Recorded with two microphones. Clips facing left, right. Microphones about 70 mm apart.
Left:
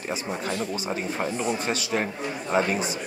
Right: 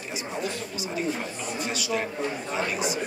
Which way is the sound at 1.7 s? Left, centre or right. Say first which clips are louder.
Left 2 dB; left.